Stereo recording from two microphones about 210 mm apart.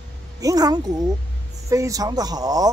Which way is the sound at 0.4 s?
15° right (ahead or behind).